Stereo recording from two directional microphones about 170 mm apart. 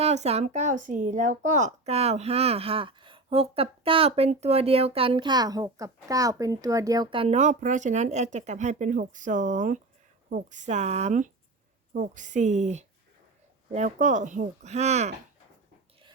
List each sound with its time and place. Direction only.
0.0 s speech: 40° right (ahead or behind)